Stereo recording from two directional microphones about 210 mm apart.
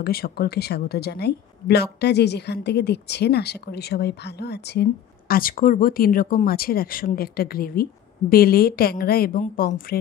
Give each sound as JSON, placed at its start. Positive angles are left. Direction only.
{"t": 0.0, "sound": "a woman's voice", "side_deg": 45}